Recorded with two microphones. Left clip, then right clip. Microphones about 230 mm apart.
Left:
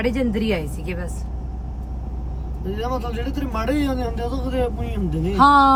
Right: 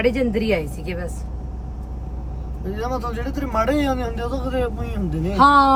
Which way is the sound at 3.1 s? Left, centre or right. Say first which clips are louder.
Right 4 dB; centre.